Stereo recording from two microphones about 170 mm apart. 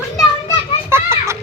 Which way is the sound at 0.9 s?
15° right (ahead or behind).